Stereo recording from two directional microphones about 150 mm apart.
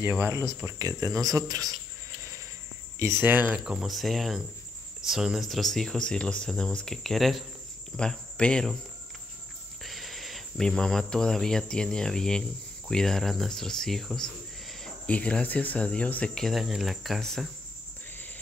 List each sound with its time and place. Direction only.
0.0 s speech: 15° right (ahead or behind)
3.0 s speech: 15° right (ahead or behind); by 7.4 s centre (ahead or behind)
7.9 s cricket: 5° left (ahead or behind)
9.8 s speech: centre (ahead or behind)